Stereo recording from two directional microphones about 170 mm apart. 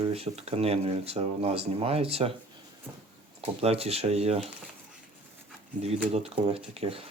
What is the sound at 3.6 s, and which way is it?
Speech, 35° right (ahead or behind).